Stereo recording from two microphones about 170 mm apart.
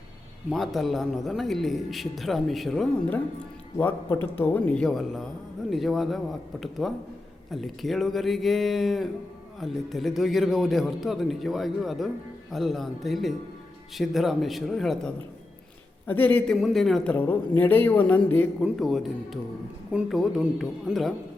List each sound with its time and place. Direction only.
0.5 s speech: centre (ahead or behind)
3.8 s speech: 10° left (ahead or behind)